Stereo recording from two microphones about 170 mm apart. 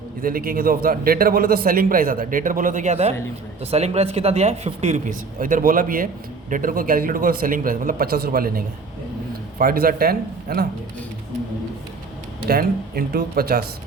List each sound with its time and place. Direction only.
0.2 s a man's voice: 55° right (ahead or behind)
12.5 s a man's voice: 60° right (ahead or behind)